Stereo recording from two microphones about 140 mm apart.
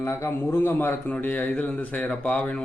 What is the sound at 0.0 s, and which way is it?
A man's voice, 20° left (ahead or behind).